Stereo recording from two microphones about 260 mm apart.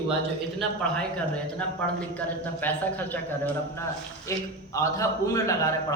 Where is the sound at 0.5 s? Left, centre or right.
Centre.